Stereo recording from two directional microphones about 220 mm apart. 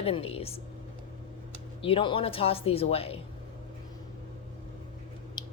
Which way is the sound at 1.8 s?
25° left (ahead or behind).